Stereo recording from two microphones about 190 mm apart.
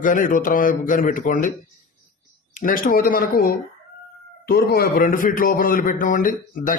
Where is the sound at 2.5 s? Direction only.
45° left (ahead or behind).